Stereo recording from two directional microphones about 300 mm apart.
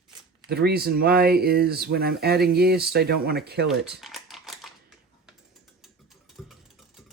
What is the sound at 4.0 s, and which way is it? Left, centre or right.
Typewriter, centre.